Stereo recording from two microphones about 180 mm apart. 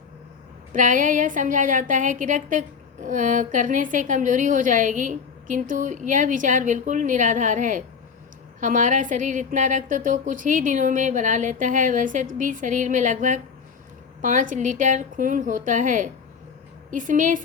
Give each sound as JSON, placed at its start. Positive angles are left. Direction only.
{"t": 0.7, "sound": "a woman's voice", "side_deg": -45}